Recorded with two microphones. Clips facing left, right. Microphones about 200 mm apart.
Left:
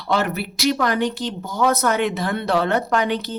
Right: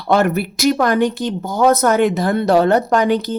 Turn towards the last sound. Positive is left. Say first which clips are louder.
# right 6 dB
turn(degrees=-40)  # may be behind; listen again after turning